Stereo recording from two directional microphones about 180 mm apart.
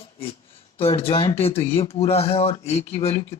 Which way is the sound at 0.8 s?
30° left (ahead or behind).